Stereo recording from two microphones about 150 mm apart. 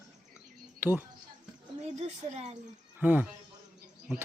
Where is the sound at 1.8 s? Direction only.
45° right (ahead or behind).